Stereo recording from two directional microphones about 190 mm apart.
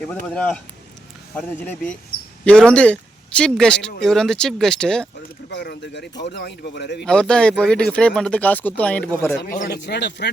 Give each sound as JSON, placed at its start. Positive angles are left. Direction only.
{"t": 0.1, "sound": "a man's voice", "side_deg": 5}
{"t": 5.5, "sound": "speech", "side_deg": 65}
{"t": 7.0, "sound": "speech", "side_deg": 5}
{"t": 9.4, "sound": "speech", "side_deg": 55}